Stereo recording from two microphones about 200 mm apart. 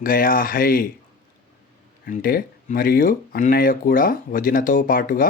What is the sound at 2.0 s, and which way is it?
Speech, 45° left (ahead or behind).